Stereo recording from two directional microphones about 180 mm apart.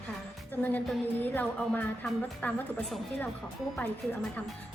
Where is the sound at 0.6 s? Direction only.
10° left (ahead or behind).